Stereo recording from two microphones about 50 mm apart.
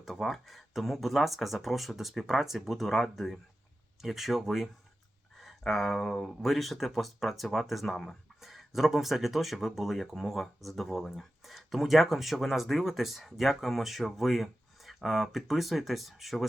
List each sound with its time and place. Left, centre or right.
0.0 s speech: centre